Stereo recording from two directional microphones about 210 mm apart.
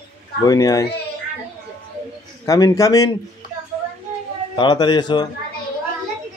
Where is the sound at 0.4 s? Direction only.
15° left (ahead or behind).